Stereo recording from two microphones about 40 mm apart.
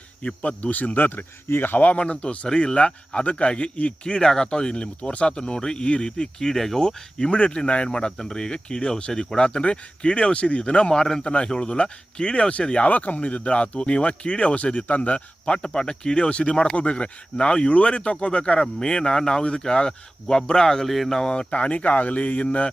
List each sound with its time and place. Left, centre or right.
0.2 s speech: left
1.5 s speech: left
1.8 s speech: left
2.5 s speech: centre
4.2 s speech: centre
7.9 s speech: centre
10.9 s speech: centre
12.9 s speech: left; by 20.8 s centre
20.8 s speech: centre
21.5 s speech: left
22.4 s speech: left